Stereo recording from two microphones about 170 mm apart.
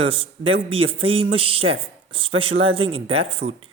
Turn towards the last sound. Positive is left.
turn(degrees=-35)  # may be behind; listen again after turning